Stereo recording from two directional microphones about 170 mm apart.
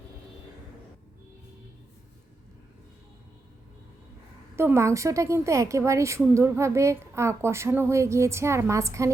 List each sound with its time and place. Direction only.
4.5 s a woman's voice: 15° right (ahead or behind)